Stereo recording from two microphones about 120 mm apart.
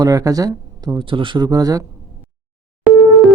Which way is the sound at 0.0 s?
30° right (ahead or behind).